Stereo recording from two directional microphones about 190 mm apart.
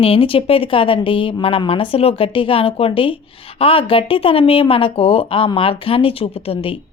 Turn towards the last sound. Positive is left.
turn(degrees=30)  # may be behind; listen again after turning